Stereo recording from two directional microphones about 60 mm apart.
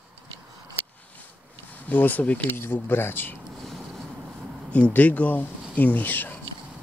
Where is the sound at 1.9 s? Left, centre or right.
Left.